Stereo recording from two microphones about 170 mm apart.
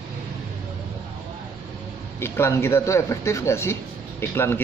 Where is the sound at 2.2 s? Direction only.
15° left (ahead or behind).